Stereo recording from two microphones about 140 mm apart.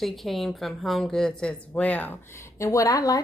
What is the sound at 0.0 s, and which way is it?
A woman's voice, centre (ahead or behind).